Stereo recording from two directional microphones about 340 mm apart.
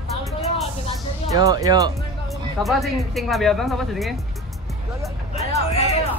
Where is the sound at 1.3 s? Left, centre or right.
Centre.